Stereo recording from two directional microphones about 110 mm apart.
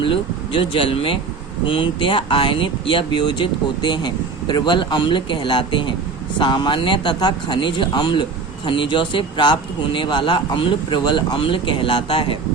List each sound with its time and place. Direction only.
0.0 s speech: 55° left (ahead or behind)